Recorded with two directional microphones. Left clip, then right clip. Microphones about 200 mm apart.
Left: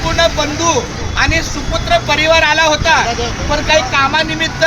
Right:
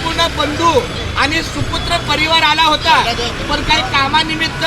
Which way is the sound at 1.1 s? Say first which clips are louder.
Left 1 dB; 25° left (ahead or behind).